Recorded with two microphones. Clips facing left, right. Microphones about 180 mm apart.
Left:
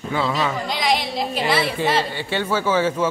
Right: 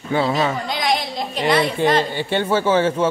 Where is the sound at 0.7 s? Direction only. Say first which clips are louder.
Even; centre (ahead or behind).